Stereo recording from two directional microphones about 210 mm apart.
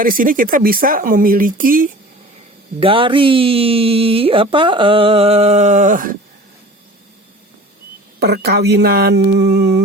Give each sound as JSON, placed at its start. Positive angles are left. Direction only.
{"t": 0.0, "sound": "speech", "side_deg": -40}
{"t": 2.8, "sound": "speech", "side_deg": -25}
{"t": 8.2, "sound": "speech", "side_deg": -50}